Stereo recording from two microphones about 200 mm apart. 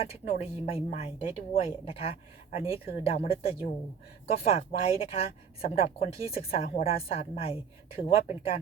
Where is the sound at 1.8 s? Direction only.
30° left (ahead or behind).